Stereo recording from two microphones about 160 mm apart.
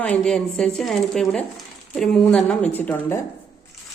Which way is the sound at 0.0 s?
5° left (ahead or behind).